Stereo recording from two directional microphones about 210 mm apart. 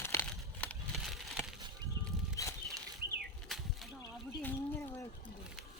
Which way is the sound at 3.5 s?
Centre (ahead or behind).